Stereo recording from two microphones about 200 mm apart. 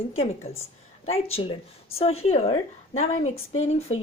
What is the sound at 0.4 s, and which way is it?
A woman's voice, 30° left (ahead or behind).